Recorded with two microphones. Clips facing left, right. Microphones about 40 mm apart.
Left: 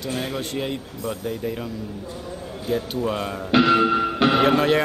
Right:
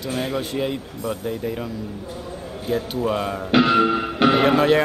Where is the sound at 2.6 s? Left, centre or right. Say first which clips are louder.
Right 1 dB; centre.